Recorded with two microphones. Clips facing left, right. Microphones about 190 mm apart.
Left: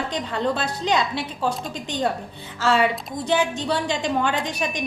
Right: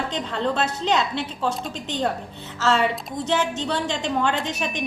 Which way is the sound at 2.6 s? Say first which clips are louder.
Left 1 dB; 5° left (ahead or behind).